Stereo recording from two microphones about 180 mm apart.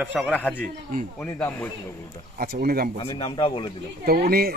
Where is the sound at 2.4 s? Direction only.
55° right (ahead or behind).